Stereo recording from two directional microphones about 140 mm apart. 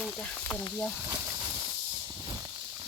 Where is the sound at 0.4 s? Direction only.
10° left (ahead or behind).